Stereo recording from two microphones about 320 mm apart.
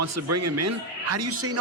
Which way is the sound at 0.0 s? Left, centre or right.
Right.